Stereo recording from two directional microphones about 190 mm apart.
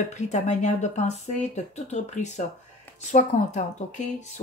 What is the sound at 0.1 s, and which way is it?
Speech, 40° left (ahead or behind).